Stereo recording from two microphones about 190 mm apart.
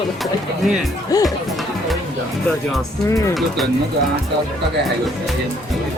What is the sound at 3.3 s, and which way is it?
Speech, centre (ahead or behind).